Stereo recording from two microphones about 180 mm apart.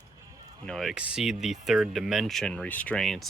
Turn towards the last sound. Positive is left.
turn(degrees=0)  # may be behind; listen again after turning